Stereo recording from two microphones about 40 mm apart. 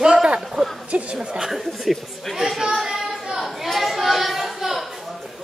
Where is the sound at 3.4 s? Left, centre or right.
Centre.